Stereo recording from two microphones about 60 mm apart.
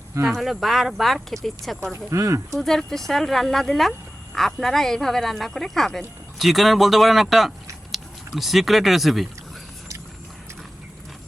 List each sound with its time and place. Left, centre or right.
0.3 s speech: centre
1.8 s speech: right
2.6 s speech: centre